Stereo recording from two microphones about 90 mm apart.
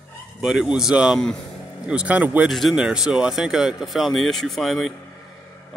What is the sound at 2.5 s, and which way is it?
Speech, centre (ahead or behind).